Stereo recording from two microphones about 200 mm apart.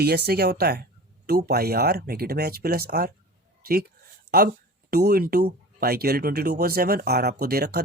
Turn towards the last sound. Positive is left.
turn(degrees=-50)  # may be behind; listen again after turning